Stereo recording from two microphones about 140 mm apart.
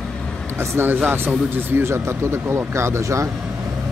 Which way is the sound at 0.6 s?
20° right (ahead or behind).